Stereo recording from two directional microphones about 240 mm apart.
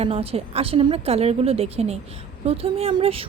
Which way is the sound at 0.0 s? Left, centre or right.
Right.